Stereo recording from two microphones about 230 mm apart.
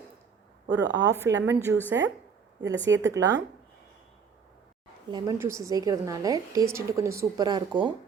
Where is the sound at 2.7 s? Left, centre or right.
Right.